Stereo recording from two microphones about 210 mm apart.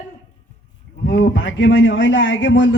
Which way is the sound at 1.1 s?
60° left (ahead or behind).